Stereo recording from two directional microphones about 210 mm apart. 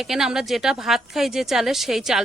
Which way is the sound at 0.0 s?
Centre (ahead or behind).